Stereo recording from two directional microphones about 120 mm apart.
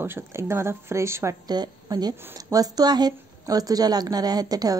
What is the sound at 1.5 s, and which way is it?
Speech, 35° right (ahead or behind).